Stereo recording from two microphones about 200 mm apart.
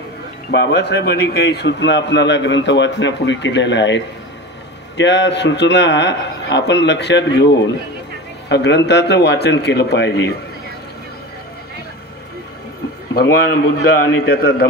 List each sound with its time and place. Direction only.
0.5 s a man's voice: 60° left (ahead or behind)
13.1 s a man's voice: 50° left (ahead or behind)